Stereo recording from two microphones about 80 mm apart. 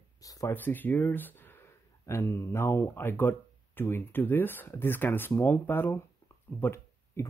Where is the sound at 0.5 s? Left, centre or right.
Left.